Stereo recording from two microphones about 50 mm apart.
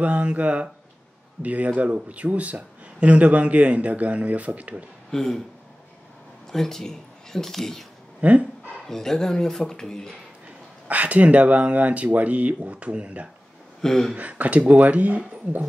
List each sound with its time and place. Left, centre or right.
0.0 s a man's voice: right
5.1 s speech: centre
6.5 s speech: centre
8.2 s speech: right
8.8 s speech: centre
10.9 s a man's voice: right
13.7 s a sound: centre
14.1 s a man's voice: right